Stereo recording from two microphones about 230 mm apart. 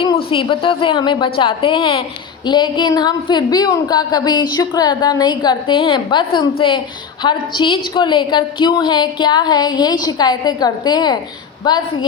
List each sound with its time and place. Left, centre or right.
0.3 s a woman's voice: left